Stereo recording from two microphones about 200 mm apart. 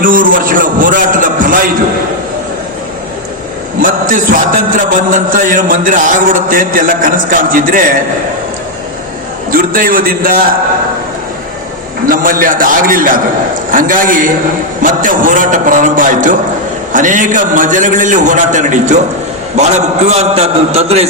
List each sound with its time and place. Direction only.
0.0 s a sound: 40° right (ahead or behind)
4.1 s music: 40° right (ahead or behind)
9.5 s music: 45° right (ahead or behind)
12.0 s music: 45° right (ahead or behind)
14.8 s a man's voice: 40° right (ahead or behind)